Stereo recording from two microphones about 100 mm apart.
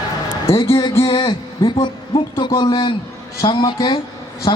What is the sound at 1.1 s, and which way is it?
A man's voice, 55° left (ahead or behind).